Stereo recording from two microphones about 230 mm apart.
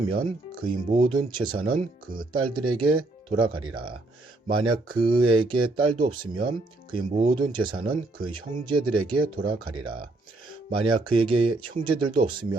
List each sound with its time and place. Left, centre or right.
0.1 s speech: right